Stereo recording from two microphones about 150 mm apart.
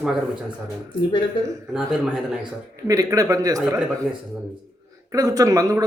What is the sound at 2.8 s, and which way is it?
Speech, 25° right (ahead or behind).